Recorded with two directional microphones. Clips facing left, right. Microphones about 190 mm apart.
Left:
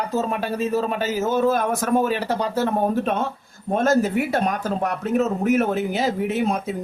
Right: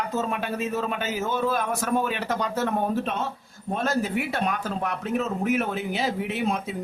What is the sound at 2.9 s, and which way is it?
A man's voice, 50° left (ahead or behind).